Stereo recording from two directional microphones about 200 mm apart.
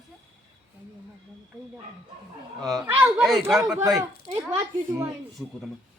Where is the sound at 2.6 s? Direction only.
Centre (ahead or behind).